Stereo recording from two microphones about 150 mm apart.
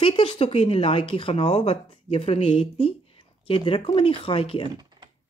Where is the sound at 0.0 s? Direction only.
35° left (ahead or behind).